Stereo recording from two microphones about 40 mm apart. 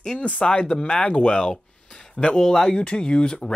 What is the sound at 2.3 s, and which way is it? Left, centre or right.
Speech, centre.